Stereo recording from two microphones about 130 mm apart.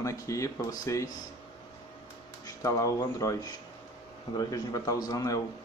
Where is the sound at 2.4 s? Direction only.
25° left (ahead or behind).